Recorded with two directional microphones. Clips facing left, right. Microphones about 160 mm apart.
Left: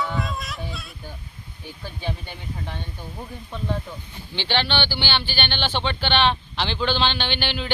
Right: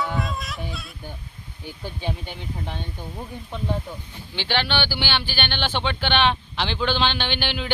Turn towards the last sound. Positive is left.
turn(degrees=-10)  # may be behind; listen again after turning